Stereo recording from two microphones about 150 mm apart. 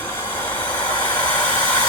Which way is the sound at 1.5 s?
30° left (ahead or behind).